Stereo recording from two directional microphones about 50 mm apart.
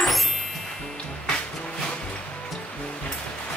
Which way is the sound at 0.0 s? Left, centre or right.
Centre.